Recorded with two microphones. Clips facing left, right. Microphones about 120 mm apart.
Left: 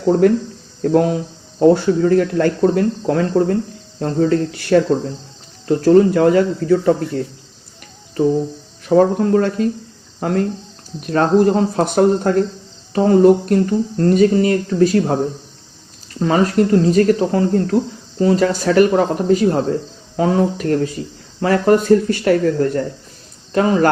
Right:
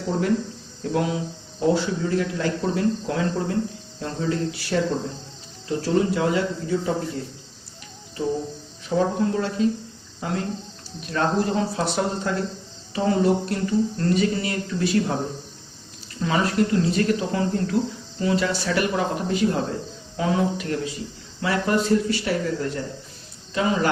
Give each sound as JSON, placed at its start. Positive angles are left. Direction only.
{"t": 0.1, "sound": "speech", "side_deg": 50}
{"t": 8.9, "sound": "speech", "side_deg": 55}
{"t": 16.2, "sound": "speech", "side_deg": 45}